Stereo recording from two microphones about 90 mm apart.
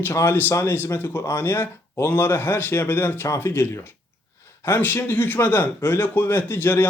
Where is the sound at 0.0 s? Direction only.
25° left (ahead or behind).